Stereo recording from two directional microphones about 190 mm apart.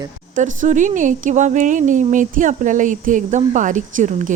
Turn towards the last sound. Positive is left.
turn(degrees=-40)  # may be behind; listen again after turning